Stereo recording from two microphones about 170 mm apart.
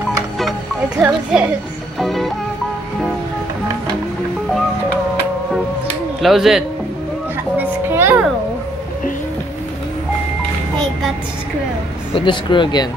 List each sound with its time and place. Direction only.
0.4 s music: centre (ahead or behind)
1.0 s a child's voice: 5° right (ahead or behind)
6.2 s a child's voice: centre (ahead or behind)
7.5 s a sound: 10° right (ahead or behind)
12.1 s speech: 30° left (ahead or behind)